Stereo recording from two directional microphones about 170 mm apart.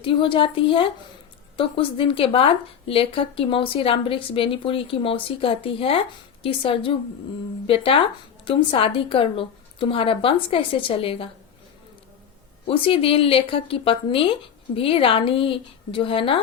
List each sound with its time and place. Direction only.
0.0 s speech: 30° left (ahead or behind)
12.6 s speech: 35° left (ahead or behind)